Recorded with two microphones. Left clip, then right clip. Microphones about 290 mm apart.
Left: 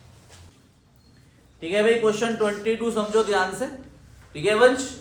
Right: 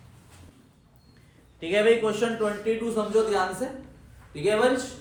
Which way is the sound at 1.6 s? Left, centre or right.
Centre.